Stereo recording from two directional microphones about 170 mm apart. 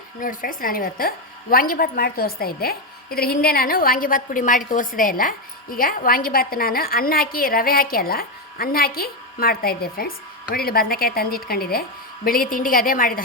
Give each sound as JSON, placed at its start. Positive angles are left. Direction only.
{"t": 0.2, "sound": "a woman's voice", "side_deg": 55}